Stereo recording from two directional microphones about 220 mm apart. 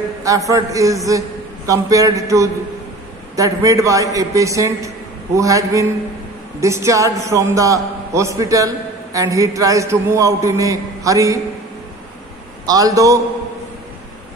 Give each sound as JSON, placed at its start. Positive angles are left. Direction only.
{"t": 0.2, "sound": "a man's voice", "side_deg": -15}
{"t": 12.6, "sound": "a man's voice", "side_deg": -15}